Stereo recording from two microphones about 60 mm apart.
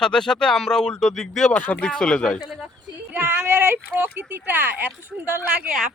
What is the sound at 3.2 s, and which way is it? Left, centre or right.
Speech, right.